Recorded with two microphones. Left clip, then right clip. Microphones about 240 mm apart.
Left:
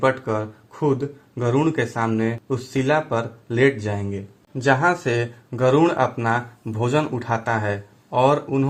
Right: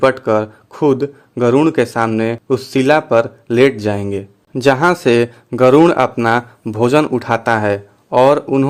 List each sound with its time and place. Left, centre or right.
0.0 s speech: right